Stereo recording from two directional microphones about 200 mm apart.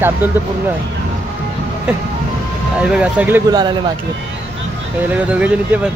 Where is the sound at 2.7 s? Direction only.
5° right (ahead or behind).